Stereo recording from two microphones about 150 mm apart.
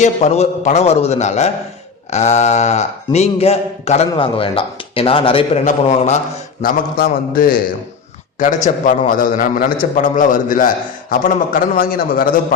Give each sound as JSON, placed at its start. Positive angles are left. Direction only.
{"t": 0.0, "sound": "speech", "side_deg": 45}
{"t": 5.6, "sound": "speech", "side_deg": 50}
{"t": 6.6, "sound": "a man's voice", "side_deg": 75}
{"t": 8.4, "sound": "a man's voice", "side_deg": 55}